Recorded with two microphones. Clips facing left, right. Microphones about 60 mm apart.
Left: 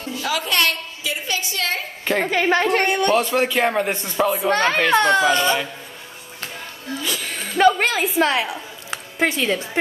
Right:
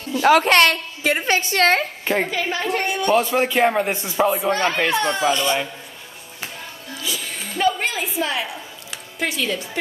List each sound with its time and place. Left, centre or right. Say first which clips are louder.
0.2 s a woman's voice: right 8 dB; right
2.4 s a woman's voice: left 5 dB; left
3.1 s speech: even; centre
4.5 s a woman's voice: left 2 dB; left
5.3 s speech: left 2 dB; left
7.0 s a sound: left 1 dB; left
8.9 s squish: left 4 dB; left